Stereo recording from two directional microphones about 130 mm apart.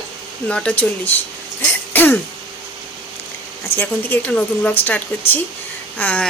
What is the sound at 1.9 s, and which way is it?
Throat clearing, 15° left (ahead or behind).